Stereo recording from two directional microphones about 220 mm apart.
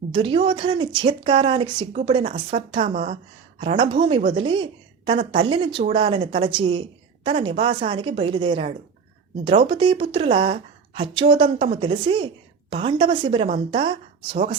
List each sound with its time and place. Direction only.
0.1 s speech: 25° right (ahead or behind)